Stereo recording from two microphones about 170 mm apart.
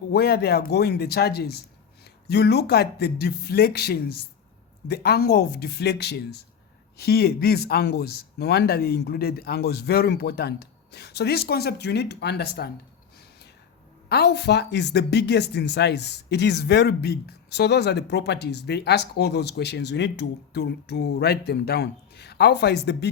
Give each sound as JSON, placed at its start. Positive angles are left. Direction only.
{"t": 0.1, "sound": "speech", "side_deg": 70}
{"t": 14.1, "sound": "speech", "side_deg": 75}